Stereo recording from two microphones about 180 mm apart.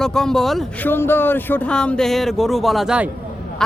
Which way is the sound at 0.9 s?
10° left (ahead or behind).